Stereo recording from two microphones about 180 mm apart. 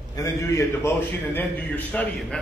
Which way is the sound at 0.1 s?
15° left (ahead or behind).